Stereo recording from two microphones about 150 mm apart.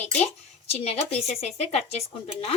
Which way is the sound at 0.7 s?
45° left (ahead or behind).